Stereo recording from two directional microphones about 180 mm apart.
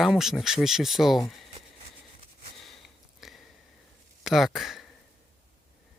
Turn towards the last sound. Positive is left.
turn(degrees=0)  # may be behind; listen again after turning